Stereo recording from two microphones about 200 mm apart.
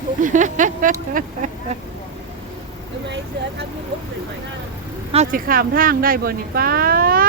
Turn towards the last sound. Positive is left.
turn(degrees=-45)  # may be behind; listen again after turning